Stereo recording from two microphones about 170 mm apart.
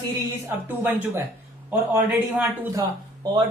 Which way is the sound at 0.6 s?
10° right (ahead or behind).